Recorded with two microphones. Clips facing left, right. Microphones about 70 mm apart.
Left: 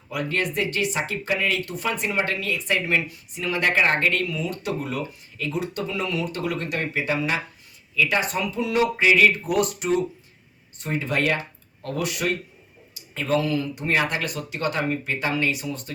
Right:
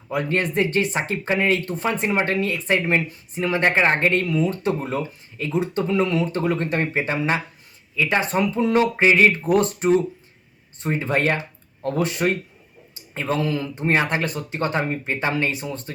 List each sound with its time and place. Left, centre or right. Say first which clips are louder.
0.1 s speech: right 3 dB; right